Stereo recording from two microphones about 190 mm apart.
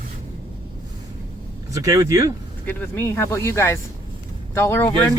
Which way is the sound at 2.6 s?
10° left (ahead or behind).